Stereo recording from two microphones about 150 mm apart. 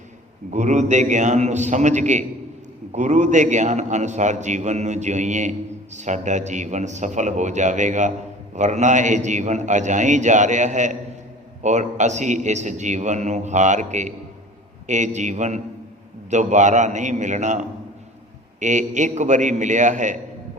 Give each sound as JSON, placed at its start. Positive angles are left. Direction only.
{"t": 0.5, "sound": "a man's voice", "side_deg": -50}